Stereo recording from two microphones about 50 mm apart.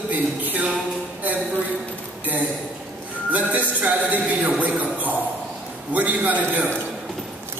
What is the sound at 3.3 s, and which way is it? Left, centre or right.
A man's voice, right.